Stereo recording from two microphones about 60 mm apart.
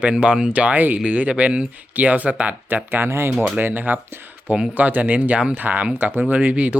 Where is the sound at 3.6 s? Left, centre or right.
Right.